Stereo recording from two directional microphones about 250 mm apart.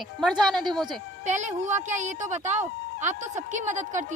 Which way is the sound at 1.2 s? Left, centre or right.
Right.